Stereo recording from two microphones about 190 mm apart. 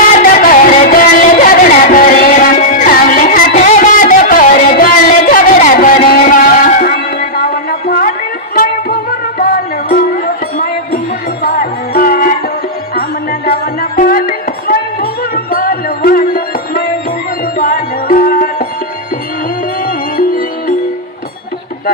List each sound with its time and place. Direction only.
0.2 s music: 45° left (ahead or behind)
11.4 s music: 50° left (ahead or behind)
19.8 s music: 50° left (ahead or behind)